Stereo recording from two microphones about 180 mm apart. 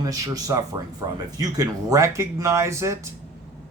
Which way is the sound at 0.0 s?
20° right (ahead or behind).